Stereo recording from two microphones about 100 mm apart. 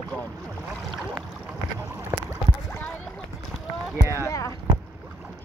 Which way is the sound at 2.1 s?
25° right (ahead or behind).